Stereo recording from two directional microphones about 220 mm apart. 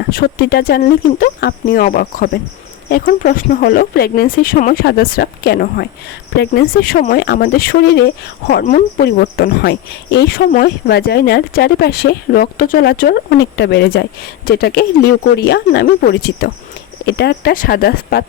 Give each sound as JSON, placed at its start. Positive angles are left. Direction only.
{"t": 0.1, "sound": "speech", "side_deg": 45}
{"t": 8.6, "sound": "speech", "side_deg": 35}